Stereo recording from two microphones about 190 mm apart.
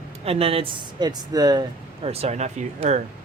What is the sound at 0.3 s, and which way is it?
Speech, 30° right (ahead or behind).